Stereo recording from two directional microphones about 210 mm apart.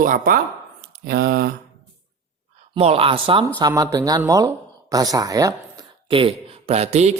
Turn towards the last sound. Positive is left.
turn(degrees=-30)  # may be behind; listen again after turning